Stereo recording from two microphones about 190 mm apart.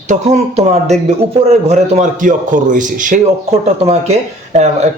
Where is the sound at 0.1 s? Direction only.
35° right (ahead or behind).